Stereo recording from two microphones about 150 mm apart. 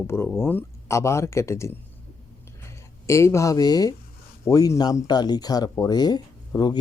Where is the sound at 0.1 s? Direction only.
15° left (ahead or behind).